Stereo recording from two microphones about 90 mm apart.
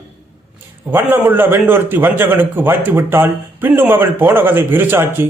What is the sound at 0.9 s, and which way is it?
A man's voice, 20° right (ahead or behind).